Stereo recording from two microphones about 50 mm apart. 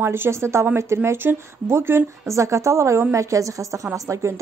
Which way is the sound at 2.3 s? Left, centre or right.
Right.